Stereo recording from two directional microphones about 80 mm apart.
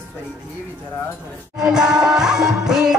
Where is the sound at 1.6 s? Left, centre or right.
Centre.